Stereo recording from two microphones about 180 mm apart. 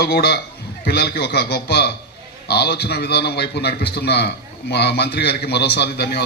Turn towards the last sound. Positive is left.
turn(degrees=65)  # may be behind; listen again after turning